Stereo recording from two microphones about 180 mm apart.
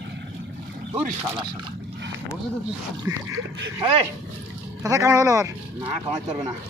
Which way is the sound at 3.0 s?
15° right (ahead or behind).